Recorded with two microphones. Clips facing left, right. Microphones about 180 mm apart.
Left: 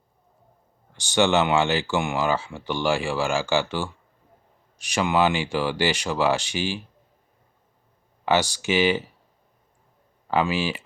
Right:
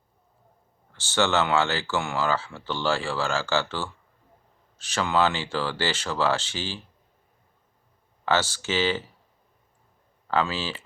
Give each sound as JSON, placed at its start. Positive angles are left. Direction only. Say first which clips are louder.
{"t": 0.9, "sound": "speech", "louder": "left 3 dB", "side_deg": 15}
{"t": 8.2, "sound": "speech", "louder": "left 3 dB", "side_deg": 15}
{"t": 10.2, "sound": "speech", "louder": "left 3 dB", "side_deg": 15}